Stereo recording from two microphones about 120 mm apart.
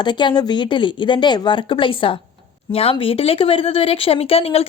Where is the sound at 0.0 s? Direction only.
40° left (ahead or behind).